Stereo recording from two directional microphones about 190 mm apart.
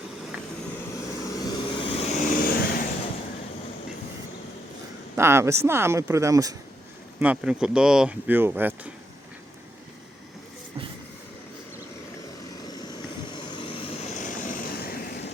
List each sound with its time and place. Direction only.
1.2 s vehicle: 20° left (ahead or behind)
2.4 s vehicle: 50° left (ahead or behind)
5.1 s speech: 15° right (ahead or behind)
7.2 s speech: 5° right (ahead or behind)
12.6 s vehicle: 20° left (ahead or behind); by 15.3 s 50° left (ahead or behind)